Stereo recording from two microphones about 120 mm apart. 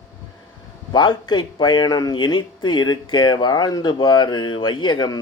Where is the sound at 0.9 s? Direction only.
35° left (ahead or behind).